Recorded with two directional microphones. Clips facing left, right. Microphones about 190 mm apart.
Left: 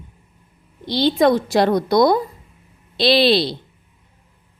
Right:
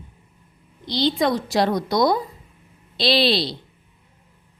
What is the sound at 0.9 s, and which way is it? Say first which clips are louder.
A woman's voice: left 5 dB; 55° left (ahead or behind).